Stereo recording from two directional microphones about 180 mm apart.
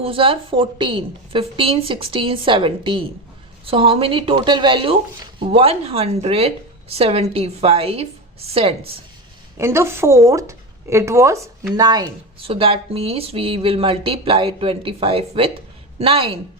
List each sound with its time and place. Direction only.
0.0 s a woman's voice: 30° right (ahead or behind)
9.6 s a woman's voice: 15° right (ahead or behind); by 16.4 s 30° right (ahead or behind)